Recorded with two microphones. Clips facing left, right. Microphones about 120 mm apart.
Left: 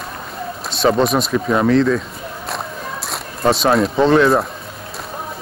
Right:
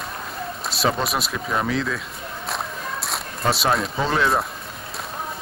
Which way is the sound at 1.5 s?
40° left (ahead or behind).